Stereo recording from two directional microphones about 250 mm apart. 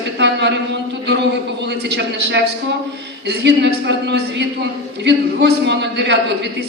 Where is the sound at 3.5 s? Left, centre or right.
Right.